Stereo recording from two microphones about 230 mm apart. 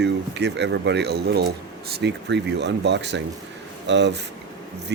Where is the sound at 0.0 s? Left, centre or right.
Right.